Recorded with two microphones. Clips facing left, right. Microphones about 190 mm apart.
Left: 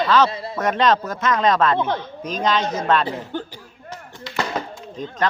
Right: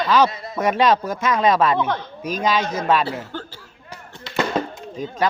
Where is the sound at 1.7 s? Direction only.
25° left (ahead or behind).